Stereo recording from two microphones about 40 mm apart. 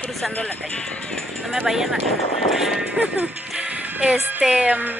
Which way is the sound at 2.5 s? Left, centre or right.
Centre.